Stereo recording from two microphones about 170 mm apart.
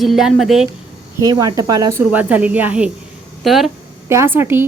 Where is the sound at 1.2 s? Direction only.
25° right (ahead or behind); by 3.7 s centre (ahead or behind).